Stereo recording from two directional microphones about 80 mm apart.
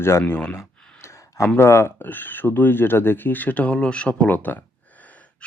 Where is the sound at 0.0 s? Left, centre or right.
Left.